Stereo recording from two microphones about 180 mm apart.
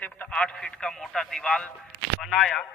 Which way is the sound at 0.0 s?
5° left (ahead or behind).